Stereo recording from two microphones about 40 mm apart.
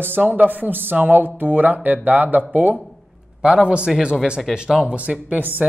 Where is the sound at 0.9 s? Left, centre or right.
Right.